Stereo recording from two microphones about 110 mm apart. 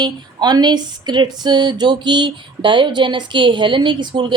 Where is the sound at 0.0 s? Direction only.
40° right (ahead or behind).